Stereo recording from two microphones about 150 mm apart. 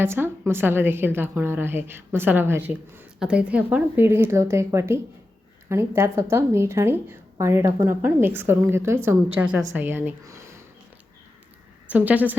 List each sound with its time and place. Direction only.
0.0 s a woman's voice: 15° right (ahead or behind)
11.9 s a woman's voice: 10° right (ahead or behind)